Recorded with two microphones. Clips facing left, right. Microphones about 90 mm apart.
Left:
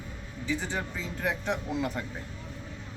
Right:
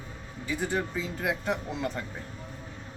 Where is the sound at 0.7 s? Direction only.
5° right (ahead or behind).